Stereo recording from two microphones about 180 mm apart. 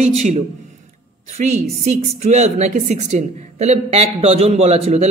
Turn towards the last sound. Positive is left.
turn(degrees=-35)  # may be behind; listen again after turning